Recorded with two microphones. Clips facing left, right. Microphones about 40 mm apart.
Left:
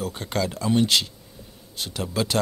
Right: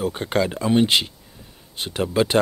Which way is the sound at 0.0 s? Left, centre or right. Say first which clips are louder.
Right 5 dB; right.